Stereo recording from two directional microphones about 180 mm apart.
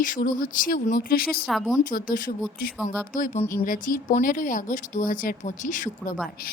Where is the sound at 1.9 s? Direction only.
50° left (ahead or behind).